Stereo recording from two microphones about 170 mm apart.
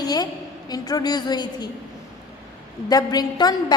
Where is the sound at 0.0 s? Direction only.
25° left (ahead or behind).